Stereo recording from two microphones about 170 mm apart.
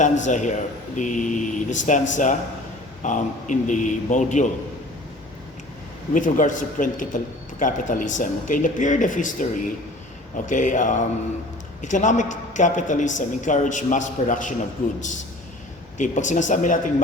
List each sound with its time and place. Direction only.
0.3 s a woman's voice: 45° left (ahead or behind)
6.1 s a woman's voice: 50° left (ahead or behind)